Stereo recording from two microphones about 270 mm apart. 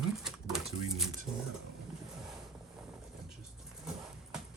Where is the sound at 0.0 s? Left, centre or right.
Centre.